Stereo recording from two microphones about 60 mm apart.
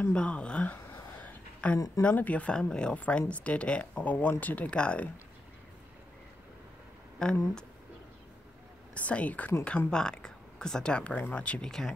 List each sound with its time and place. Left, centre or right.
0.1 s speech: centre
1.2 s a sound: left
2.0 s speech: left
7.2 s speech: centre
8.9 s speech: left
11.6 s speech: centre